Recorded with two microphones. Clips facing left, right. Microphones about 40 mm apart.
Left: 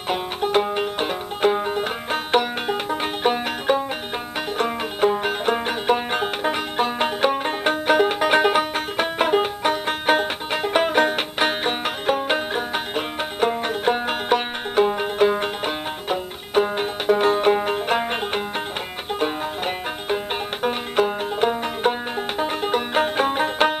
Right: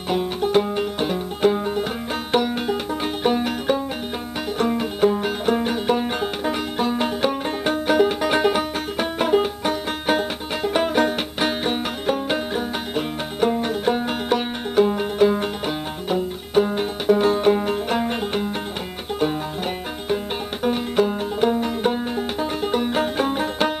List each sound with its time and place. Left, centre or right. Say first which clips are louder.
0.1 s music: right 2 dB; centre